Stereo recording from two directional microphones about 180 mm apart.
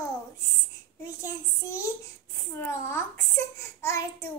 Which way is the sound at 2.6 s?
15° left (ahead or behind).